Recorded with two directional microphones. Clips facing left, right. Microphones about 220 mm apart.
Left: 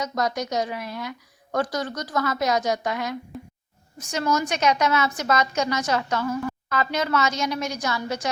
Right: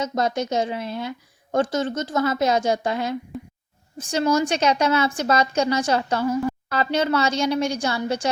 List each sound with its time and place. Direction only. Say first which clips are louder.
0.0 s a woman's voice: right 3 dB; 25° right (ahead or behind)